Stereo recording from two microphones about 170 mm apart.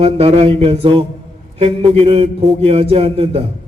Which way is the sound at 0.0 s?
35° right (ahead or behind).